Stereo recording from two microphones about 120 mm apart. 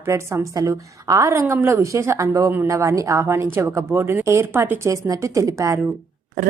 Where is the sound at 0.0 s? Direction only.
20° right (ahead or behind).